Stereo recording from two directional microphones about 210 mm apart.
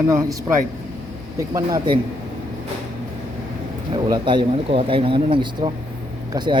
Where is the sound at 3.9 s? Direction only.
20° right (ahead or behind).